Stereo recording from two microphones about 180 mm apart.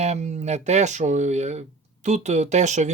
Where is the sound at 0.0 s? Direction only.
40° right (ahead or behind).